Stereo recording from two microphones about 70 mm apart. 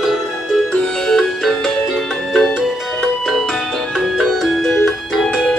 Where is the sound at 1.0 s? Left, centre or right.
Centre.